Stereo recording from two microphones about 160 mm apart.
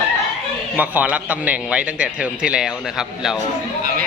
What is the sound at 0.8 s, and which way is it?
A man's voice, 10° right (ahead or behind).